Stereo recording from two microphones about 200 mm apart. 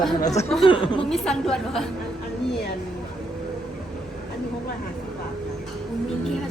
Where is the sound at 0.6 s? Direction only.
25° left (ahead or behind).